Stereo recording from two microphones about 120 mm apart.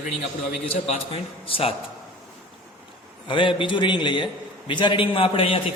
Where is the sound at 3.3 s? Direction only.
45° left (ahead or behind).